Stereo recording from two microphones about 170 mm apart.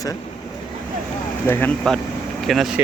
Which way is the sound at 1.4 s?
15° left (ahead or behind).